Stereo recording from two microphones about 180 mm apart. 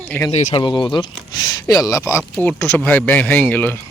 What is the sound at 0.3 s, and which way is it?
Speech, 30° left (ahead or behind).